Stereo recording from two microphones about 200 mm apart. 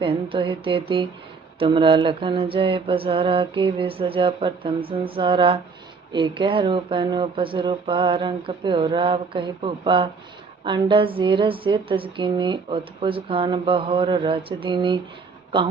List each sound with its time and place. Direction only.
0.0 s a woman's voice: 25° right (ahead or behind)